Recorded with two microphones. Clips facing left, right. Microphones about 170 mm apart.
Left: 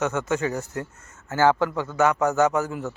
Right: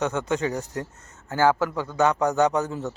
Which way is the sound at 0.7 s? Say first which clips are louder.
Even; 35° right (ahead or behind).